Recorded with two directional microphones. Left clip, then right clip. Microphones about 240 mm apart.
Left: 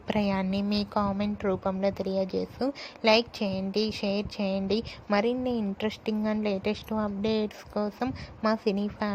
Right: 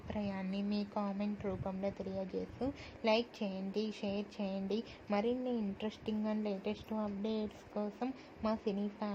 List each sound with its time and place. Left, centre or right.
0.1 s a woman's voice: left